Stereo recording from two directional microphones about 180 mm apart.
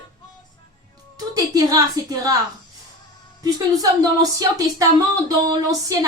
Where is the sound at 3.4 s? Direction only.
20° right (ahead or behind).